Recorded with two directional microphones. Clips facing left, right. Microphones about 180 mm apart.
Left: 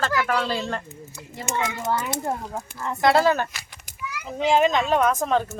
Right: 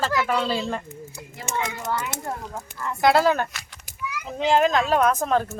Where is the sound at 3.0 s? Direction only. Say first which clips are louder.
Even; centre (ahead or behind).